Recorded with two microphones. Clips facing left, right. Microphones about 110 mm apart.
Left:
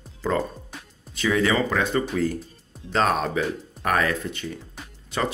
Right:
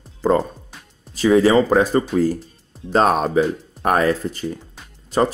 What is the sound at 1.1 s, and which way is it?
Speech, 35° right (ahead or behind).